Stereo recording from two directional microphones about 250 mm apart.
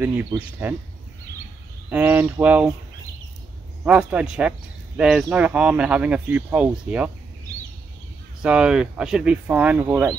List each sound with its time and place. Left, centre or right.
0.0 s speech: centre
1.9 s speech: centre
3.8 s speech: centre
8.4 s speech: centre